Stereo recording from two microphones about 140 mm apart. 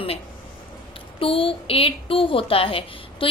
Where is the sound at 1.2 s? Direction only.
40° left (ahead or behind).